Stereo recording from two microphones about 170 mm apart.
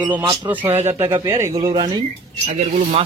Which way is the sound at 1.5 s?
30° right (ahead or behind).